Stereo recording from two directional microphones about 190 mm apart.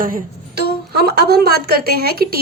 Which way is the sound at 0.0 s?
50° right (ahead or behind).